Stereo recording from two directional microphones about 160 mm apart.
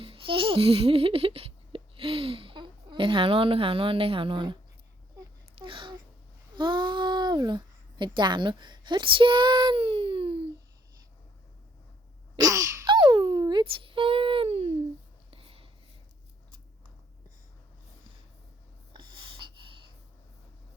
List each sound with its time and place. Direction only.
0.0 s speech: 35° right (ahead or behind)
5.5 s a sound: 30° right (ahead or behind)
6.6 s a child's voice: 30° right (ahead or behind)
12.4 s a sound: 20° right (ahead or behind); by 14.7 s 40° right (ahead or behind)
15.3 s whispering: 35° right (ahead or behind)
18.9 s gasp: 30° right (ahead or behind)